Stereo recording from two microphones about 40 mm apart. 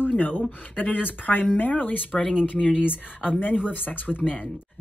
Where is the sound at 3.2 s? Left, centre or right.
Left.